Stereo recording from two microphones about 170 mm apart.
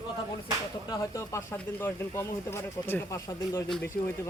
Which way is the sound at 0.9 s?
20° left (ahead or behind).